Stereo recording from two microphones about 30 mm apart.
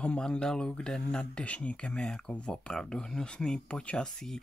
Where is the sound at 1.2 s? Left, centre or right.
Left.